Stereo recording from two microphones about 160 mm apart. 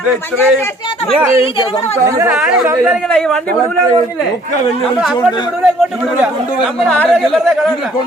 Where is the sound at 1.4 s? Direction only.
35° left (ahead or behind).